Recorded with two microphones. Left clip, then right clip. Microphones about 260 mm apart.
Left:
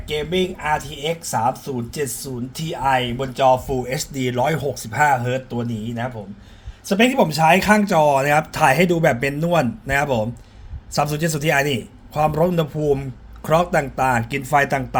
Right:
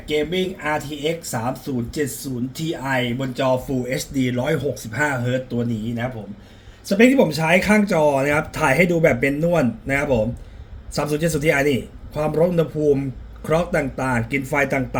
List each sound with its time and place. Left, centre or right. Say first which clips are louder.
0.9 s a man's voice: even; left